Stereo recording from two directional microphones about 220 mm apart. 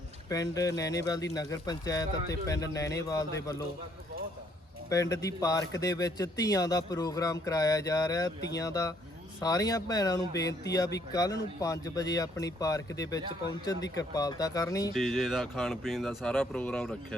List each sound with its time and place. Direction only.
0.3 s speech: 15° left (ahead or behind)
4.9 s speech: 15° left (ahead or behind)
14.9 s speech: centre (ahead or behind)